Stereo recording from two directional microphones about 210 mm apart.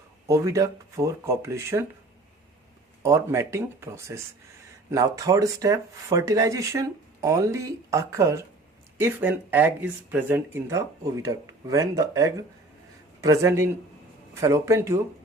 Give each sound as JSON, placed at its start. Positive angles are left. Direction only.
{"t": 0.3, "sound": "speech", "side_deg": -15}
{"t": 3.0, "sound": "speech", "side_deg": -10}